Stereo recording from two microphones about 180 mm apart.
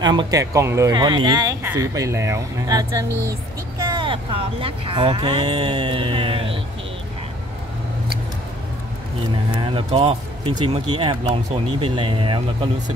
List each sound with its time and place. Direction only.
0.0 s speech: 25° right (ahead or behind)
5.8 s a sound: 30° right (ahead or behind)
9.5 s speech: 25° right (ahead or behind)